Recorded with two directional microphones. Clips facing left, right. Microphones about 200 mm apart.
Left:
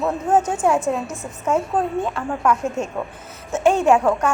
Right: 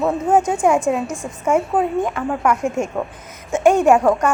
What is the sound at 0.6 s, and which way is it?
Speech, 15° right (ahead or behind).